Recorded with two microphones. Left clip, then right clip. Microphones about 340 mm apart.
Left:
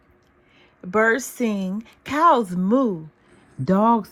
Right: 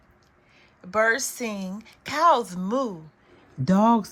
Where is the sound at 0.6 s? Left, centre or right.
Centre.